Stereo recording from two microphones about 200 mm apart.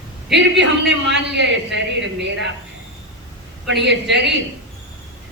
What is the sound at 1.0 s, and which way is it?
A man's voice, 60° right (ahead or behind).